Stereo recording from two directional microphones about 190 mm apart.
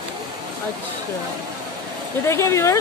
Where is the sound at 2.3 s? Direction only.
15° left (ahead or behind).